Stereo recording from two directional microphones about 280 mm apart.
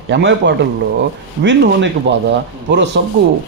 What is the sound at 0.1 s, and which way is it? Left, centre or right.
A man's voice, right.